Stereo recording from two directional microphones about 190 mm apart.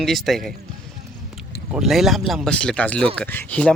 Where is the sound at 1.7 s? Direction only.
Centre (ahead or behind).